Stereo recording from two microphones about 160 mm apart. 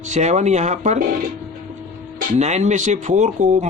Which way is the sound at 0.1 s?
45° right (ahead or behind).